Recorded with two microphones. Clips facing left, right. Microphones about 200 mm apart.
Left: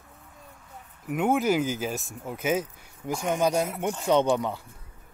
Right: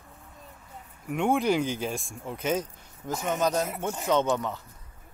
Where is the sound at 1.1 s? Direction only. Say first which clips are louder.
Left 1 dB; 5° left (ahead or behind).